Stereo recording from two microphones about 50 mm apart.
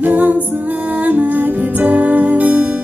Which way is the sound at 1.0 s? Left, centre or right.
Right.